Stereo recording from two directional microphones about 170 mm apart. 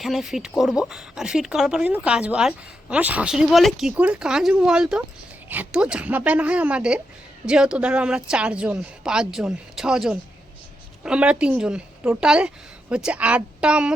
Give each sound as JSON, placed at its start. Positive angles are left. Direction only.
{"t": 0.0, "sound": "speech", "side_deg": 0}